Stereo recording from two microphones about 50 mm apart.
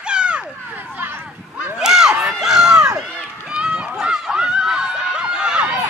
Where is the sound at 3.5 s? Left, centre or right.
Centre.